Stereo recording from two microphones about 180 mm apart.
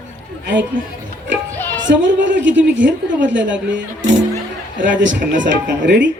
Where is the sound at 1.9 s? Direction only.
90° right.